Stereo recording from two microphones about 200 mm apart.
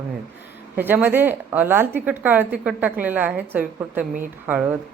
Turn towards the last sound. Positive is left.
turn(degrees=-10)  # may be behind; listen again after turning